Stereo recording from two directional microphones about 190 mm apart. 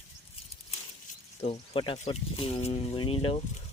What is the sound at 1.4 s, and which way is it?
Speech, 30° left (ahead or behind).